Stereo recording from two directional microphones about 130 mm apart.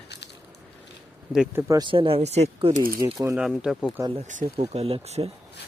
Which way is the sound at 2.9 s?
20° right (ahead or behind).